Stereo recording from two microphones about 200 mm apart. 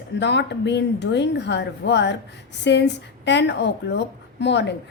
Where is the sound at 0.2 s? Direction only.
60° left (ahead or behind).